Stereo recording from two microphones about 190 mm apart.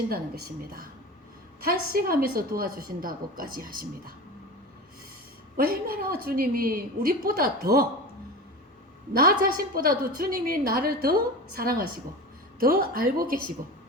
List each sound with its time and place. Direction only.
0.1 s a woman's voice: 55° right (ahead or behind)
5.5 s a woman's voice: 50° right (ahead or behind)
9.1 s a woman's voice: 50° right (ahead or behind)